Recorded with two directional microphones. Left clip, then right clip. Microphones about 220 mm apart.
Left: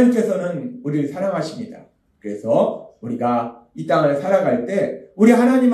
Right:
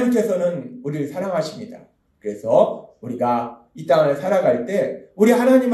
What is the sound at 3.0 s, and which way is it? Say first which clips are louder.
Speech: even; 40° right (ahead or behind).